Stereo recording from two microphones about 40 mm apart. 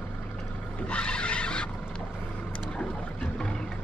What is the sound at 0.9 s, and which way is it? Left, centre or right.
Vehicle, left.